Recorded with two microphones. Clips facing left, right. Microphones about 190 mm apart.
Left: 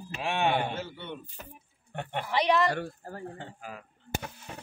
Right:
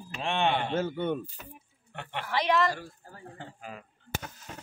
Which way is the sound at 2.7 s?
60° left (ahead or behind).